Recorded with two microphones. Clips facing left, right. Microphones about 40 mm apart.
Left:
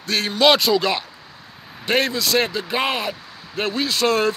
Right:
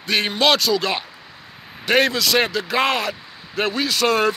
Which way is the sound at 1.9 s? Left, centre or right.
Right.